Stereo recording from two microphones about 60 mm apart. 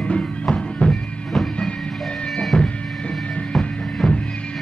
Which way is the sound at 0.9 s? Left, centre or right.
Centre.